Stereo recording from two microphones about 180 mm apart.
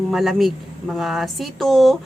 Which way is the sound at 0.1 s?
Centre (ahead or behind).